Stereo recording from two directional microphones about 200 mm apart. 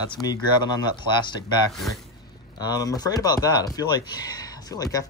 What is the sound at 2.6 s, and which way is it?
Speech, 20° left (ahead or behind).